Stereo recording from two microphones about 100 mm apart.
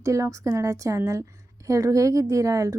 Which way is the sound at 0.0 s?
30° right (ahead or behind).